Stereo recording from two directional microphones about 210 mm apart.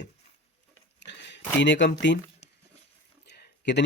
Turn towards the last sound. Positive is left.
turn(degrees=55)  # may be behind; listen again after turning